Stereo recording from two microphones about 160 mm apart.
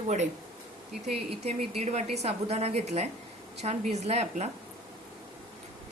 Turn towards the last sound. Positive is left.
turn(degrees=-40)  # may be behind; listen again after turning